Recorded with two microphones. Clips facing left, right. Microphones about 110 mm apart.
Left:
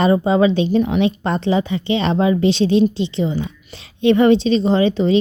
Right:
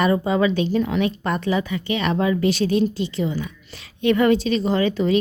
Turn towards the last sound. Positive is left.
turn(degrees=25)  # may be behind; listen again after turning